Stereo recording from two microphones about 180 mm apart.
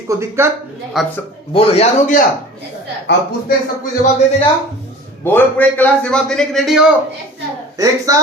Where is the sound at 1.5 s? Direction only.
35° left (ahead or behind).